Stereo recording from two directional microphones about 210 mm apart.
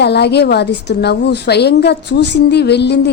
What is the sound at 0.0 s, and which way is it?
A woman's voice, 50° left (ahead or behind).